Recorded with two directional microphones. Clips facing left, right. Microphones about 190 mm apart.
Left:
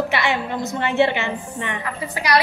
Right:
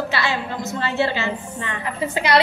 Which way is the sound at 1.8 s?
25° right (ahead or behind).